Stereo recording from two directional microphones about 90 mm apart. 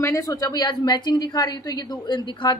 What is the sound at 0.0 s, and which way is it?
A woman's voice, 35° left (ahead or behind).